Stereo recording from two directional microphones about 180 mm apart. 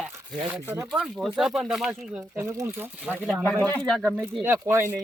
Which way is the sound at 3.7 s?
5° left (ahead or behind).